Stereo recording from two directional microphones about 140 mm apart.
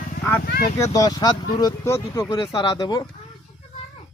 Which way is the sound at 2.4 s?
30° left (ahead or behind).